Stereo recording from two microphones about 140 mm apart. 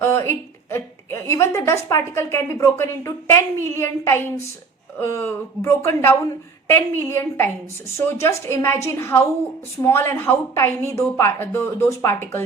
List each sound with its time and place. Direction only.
0.0 s a woman's voice: 20° left (ahead or behind)